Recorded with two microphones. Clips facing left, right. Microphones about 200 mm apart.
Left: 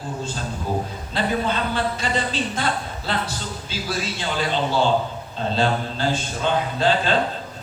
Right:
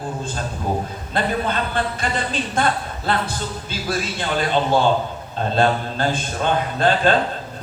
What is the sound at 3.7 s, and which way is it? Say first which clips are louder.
A man's voice: right 2 dB; 55° right (ahead or behind).